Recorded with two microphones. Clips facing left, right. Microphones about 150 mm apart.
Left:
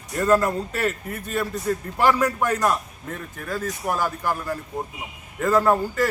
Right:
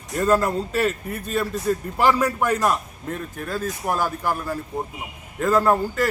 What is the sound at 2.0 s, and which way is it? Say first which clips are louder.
Speech: even; 10° right (ahead or behind).